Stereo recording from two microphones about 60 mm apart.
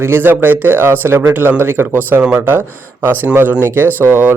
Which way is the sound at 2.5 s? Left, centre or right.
Right.